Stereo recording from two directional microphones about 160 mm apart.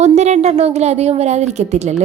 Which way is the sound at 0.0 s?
45° right (ahead or behind).